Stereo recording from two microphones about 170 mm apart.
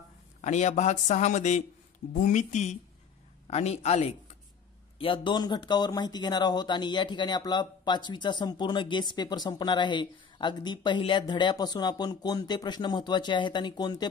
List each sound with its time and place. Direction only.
0.4 s a man's voice: 45° left (ahead or behind); by 14.0 s 25° left (ahead or behind)